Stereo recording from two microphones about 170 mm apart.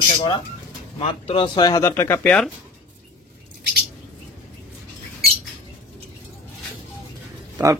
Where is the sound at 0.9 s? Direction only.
35° left (ahead or behind); by 2.3 s 15° left (ahead or behind).